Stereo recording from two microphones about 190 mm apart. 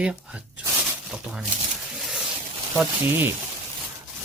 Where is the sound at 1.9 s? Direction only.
Centre (ahead or behind).